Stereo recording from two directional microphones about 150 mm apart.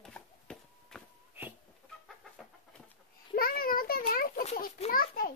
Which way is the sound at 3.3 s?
75° left (ahead or behind).